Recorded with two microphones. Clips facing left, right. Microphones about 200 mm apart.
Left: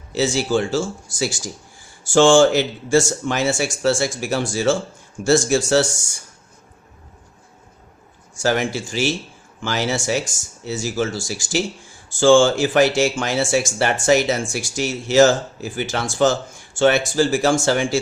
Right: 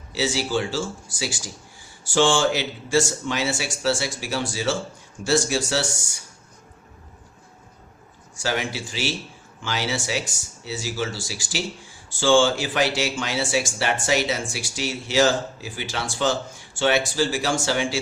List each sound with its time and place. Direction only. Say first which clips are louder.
0.1 s speech: left 5 dB; 50° left (ahead or behind)
8.4 s speech: left 6 dB; 45° left (ahead or behind)